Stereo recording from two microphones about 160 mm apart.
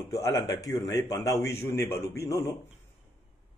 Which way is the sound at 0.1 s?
20° left (ahead or behind).